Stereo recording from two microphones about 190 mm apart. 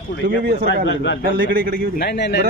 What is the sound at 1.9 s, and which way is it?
Speech, 55° left (ahead or behind).